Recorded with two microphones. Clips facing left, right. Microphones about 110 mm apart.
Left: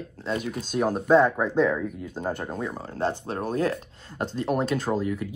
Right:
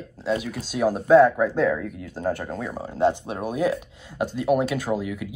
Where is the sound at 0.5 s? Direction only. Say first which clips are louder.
Even; 50° left (ahead or behind).